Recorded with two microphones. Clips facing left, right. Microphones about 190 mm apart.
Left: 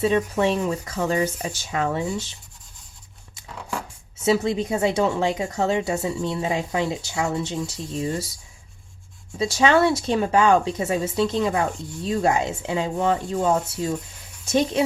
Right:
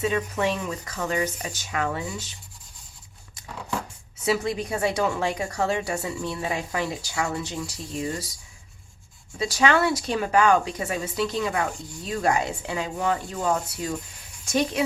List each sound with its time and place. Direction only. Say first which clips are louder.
0.0 s speech: left 4 dB; 30° left (ahead or behind)
4.2 s speech: left 4 dB; 25° left (ahead or behind)
9.4 s speech: left 4 dB; 25° left (ahead or behind)